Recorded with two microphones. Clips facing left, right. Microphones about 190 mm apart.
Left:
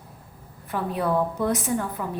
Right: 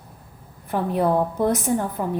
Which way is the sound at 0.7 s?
45° right (ahead or behind).